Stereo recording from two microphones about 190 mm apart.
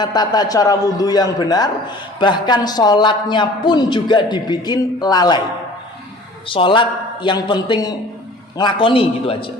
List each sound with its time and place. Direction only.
0.0 s a man's voice: 20° left (ahead or behind)
6.5 s a man's voice: 25° left (ahead or behind)